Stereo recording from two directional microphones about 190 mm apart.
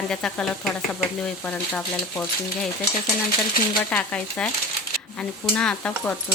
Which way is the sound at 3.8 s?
5° left (ahead or behind).